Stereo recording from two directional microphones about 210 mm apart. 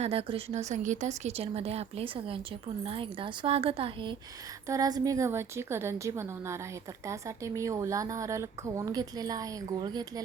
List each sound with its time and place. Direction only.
0.0 s a woman's voice: 25° right (ahead or behind)